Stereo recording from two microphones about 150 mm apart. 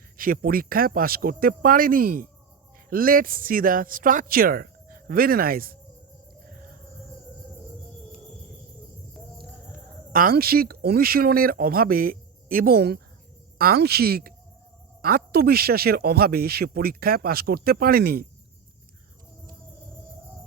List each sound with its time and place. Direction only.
0.2 s speech: 75° right (ahead or behind)
10.1 s speech: 70° right (ahead or behind); by 18.3 s 85° right